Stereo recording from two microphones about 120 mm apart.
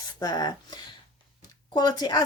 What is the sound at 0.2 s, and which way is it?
Speech, 35° left (ahead or behind).